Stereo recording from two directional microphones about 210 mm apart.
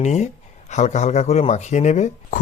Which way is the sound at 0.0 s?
35° left (ahead or behind).